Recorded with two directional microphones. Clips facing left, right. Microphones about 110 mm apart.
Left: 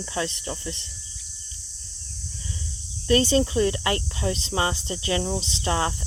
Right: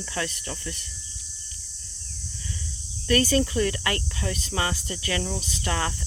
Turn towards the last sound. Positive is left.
turn(degrees=25)  # may be behind; listen again after turning